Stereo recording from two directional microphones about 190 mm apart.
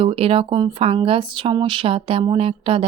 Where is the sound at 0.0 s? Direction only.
30° right (ahead or behind).